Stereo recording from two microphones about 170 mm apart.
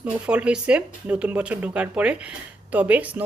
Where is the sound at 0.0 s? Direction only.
5° right (ahead or behind).